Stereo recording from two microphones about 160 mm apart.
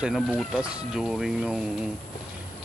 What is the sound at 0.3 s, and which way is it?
Speech, 5° left (ahead or behind).